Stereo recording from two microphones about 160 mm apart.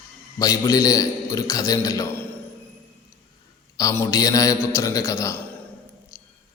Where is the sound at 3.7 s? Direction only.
20° left (ahead or behind).